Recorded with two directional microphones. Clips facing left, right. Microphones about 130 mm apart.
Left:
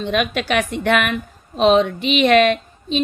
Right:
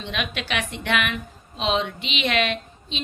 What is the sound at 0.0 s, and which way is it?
A woman's voice, 45° left (ahead or behind).